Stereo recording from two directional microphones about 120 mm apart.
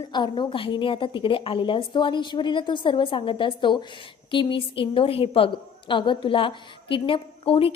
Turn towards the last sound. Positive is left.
turn(degrees=50)  # may be behind; listen again after turning